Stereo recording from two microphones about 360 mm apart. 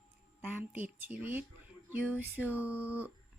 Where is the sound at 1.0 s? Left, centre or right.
Centre.